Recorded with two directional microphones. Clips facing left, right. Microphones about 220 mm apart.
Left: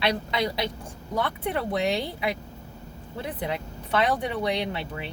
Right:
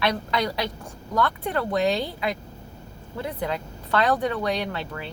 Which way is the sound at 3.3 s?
20° left (ahead or behind).